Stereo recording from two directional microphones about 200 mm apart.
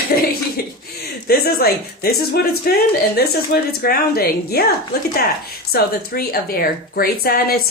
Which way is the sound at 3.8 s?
50° left (ahead or behind).